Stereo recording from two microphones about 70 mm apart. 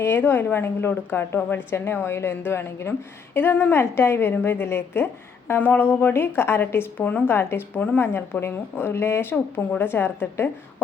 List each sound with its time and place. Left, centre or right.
0.0 s a woman's voice: left